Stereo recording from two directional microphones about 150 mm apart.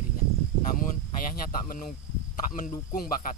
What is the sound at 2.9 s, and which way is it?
Speech, 70° left (ahead or behind).